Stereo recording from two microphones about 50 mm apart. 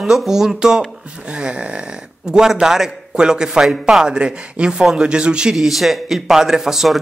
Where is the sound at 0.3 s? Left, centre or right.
Centre.